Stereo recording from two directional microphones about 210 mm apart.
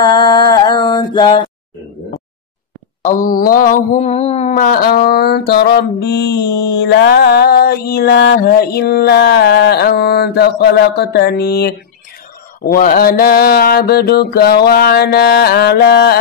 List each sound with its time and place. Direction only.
0.0 s mantra: 20° left (ahead or behind)
3.0 s mantra: 40° left (ahead or behind)